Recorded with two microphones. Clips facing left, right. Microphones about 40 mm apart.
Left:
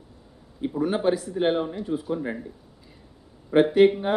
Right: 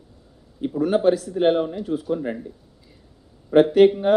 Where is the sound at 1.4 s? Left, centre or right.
Centre.